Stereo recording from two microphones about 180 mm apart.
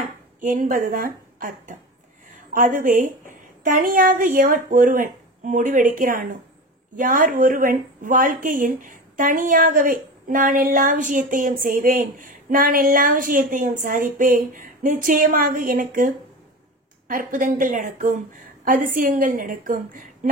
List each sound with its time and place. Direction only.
0.4 s speech: 45° right (ahead or behind)
17.1 s speech: 50° right (ahead or behind)